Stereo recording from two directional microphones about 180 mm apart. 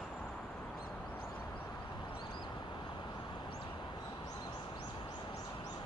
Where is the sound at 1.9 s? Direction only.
25° left (ahead or behind).